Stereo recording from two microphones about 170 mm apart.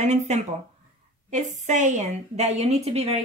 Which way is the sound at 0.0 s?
45° right (ahead or behind).